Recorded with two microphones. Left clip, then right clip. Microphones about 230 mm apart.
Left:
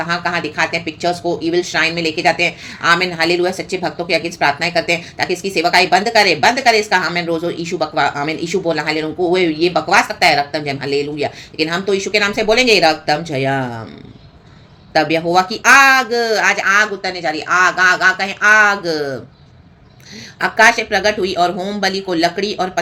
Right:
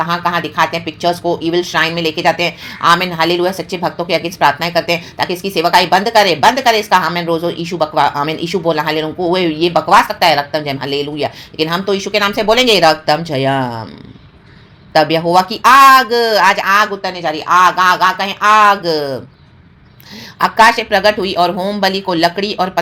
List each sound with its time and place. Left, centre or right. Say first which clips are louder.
0.0 s speech: right 3 dB; centre
14.9 s speech: right 3 dB; centre
20.4 s speech: right 2 dB; centre